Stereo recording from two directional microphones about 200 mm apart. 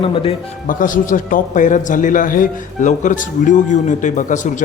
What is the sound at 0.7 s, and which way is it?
A man's voice, 40° left (ahead or behind).